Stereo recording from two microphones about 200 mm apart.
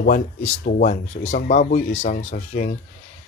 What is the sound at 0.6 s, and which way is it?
Speech, 40° left (ahead or behind).